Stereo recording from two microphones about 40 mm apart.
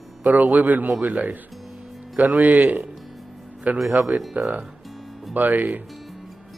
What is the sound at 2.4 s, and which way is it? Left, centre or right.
Speech, right.